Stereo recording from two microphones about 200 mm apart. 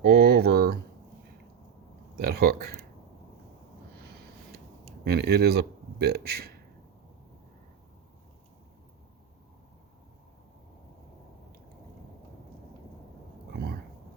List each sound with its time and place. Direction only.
0.0 s speech: 55° right (ahead or behind)
2.1 s speech: 55° right (ahead or behind)
5.0 s speech: 55° right (ahead or behind)